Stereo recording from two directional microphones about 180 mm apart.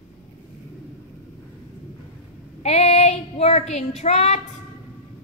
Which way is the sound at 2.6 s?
35° left (ahead or behind).